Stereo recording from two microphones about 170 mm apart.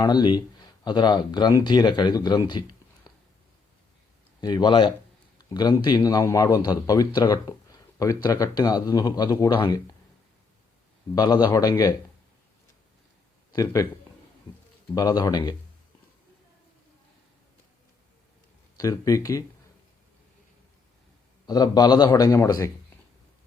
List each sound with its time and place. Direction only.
0.0 s a man's voice: 25° left (ahead or behind)
3.1 s a sound: 25° left (ahead or behind)
4.4 s a man's voice: 25° left (ahead or behind)
11.1 s a man's voice: 25° left (ahead or behind)
13.5 s speech: 20° left (ahead or behind)
14.9 s a man's voice: 25° left (ahead or behind)
18.8 s a man's voice: 20° left (ahead or behind)
21.4 s a man's voice: 25° left (ahead or behind)